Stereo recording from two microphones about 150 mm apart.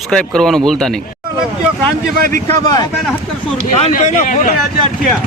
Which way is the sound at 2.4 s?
25° left (ahead or behind).